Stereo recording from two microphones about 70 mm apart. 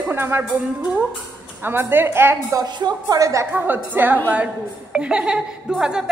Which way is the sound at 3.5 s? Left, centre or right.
Right.